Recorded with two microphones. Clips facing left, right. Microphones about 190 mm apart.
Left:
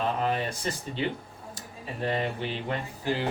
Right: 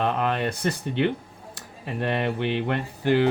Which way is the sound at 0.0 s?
65° right (ahead or behind).